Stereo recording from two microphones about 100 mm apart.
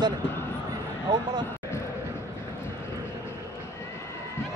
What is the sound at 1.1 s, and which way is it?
Basketball bounce, 50° right (ahead or behind).